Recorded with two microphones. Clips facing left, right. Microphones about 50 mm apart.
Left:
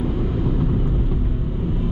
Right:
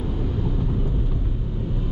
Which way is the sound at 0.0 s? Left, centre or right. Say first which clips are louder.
Left 4 dB; left.